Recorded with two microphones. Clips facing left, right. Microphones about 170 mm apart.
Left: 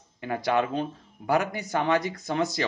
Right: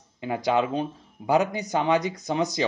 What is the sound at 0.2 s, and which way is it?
A man's voice, 20° right (ahead or behind).